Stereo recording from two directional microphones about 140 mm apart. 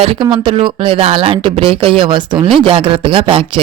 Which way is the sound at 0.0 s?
40° right (ahead or behind).